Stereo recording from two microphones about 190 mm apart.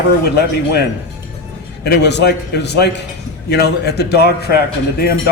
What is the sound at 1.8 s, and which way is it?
A man's voice, 65° left (ahead or behind).